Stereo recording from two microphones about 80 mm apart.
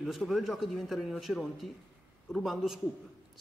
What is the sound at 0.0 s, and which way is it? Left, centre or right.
A man's voice, centre.